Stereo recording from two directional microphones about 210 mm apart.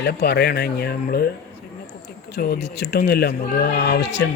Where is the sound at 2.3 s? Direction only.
50° left (ahead or behind).